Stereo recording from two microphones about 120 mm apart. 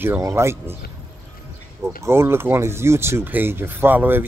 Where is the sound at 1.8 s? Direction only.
20° right (ahead or behind).